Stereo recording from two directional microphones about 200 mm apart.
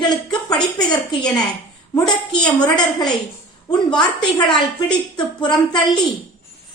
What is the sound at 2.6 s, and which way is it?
A woman's voice, 20° left (ahead or behind).